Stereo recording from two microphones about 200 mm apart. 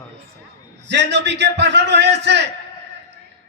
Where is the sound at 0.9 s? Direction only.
60° right (ahead or behind).